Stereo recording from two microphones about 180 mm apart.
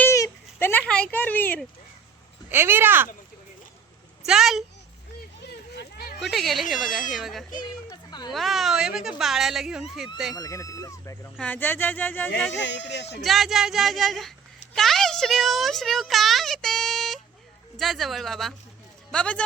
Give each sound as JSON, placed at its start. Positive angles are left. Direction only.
{"t": 0.0, "sound": "a sound", "side_deg": 15}
{"t": 2.5, "sound": "speech", "side_deg": -10}
{"t": 4.3, "sound": "a child's voice", "side_deg": 0}
{"t": 5.4, "sound": "a sound", "side_deg": 65}
{"t": 6.1, "sound": "a child's voice", "side_deg": 0}
{"t": 7.6, "sound": "a sound", "side_deg": 25}
{"t": 8.3, "sound": "a child's voice", "side_deg": 0}
{"t": 10.3, "sound": "speech", "side_deg": 20}
{"t": 12.5, "sound": "speech", "side_deg": 85}
{"t": 13.2, "sound": "a child's voice", "side_deg": 0}